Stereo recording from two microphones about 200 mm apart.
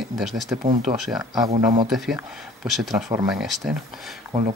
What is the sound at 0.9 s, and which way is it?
Speech, 20° right (ahead or behind).